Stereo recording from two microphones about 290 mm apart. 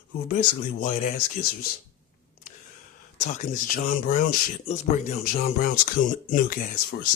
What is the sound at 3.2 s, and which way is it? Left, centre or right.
Speech, left.